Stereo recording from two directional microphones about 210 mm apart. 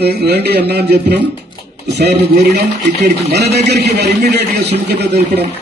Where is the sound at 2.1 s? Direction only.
35° right (ahead or behind).